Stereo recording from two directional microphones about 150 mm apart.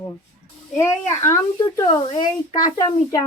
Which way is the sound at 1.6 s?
30° left (ahead or behind).